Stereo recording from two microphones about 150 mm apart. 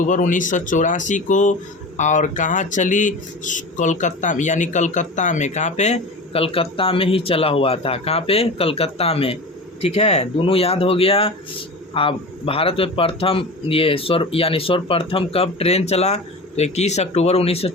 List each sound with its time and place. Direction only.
0.0 s speech: 60° left (ahead or behind); by 17.7 s 40° left (ahead or behind)